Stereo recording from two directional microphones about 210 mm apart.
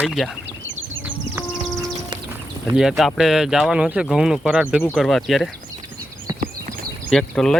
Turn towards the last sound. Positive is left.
turn(degrees=0)  # may be behind; listen again after turning